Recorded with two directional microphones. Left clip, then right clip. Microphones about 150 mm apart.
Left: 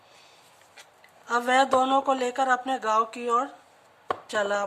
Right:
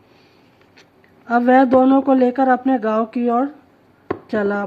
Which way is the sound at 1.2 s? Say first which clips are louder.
Right 8 dB; 15° right (ahead or behind).